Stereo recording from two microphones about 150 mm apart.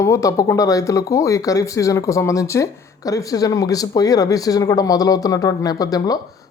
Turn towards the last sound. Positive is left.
turn(degrees=25)  # may be behind; listen again after turning